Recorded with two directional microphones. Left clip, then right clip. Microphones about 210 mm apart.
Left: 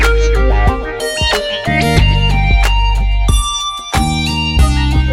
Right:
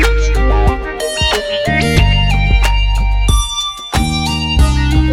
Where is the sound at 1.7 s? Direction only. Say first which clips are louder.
Left 3 dB; 50° right (ahead or behind).